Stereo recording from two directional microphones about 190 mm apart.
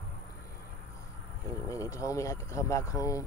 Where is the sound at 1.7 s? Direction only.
15° left (ahead or behind).